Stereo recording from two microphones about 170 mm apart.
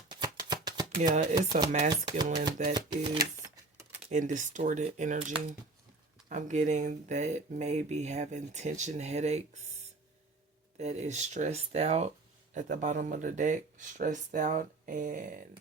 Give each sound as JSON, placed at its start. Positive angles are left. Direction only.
{"t": 0.1, "sound": "a sound", "side_deg": -25}
{"t": 1.1, "sound": "speech", "side_deg": -40}
{"t": 1.4, "sound": "speech", "side_deg": -25}
{"t": 4.1, "sound": "speech", "side_deg": -45}
{"t": 6.2, "sound": "speech", "side_deg": -45}
{"t": 10.8, "sound": "speech", "side_deg": -40}
{"t": 12.5, "sound": "speech", "side_deg": -50}